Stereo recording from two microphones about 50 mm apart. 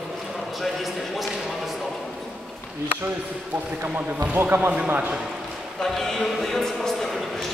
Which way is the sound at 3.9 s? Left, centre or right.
Right.